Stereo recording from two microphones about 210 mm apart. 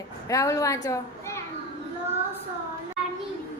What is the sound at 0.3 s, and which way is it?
A woman's voice, 15° left (ahead or behind).